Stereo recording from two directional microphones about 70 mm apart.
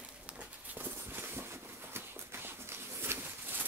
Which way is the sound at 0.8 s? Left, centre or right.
Right.